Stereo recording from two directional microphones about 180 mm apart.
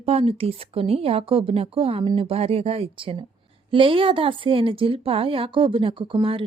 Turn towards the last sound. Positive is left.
turn(degrees=-30)  # may be behind; listen again after turning